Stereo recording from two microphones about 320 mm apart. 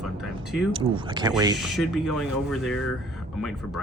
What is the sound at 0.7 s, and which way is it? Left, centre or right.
Speech, centre.